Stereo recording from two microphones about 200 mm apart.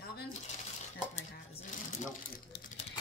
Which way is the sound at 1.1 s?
35° left (ahead or behind).